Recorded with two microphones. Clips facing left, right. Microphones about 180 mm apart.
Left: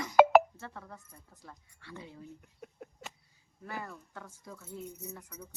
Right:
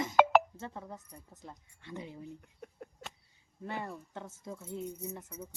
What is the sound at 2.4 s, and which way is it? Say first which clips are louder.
Speech: even; 5° left (ahead or behind).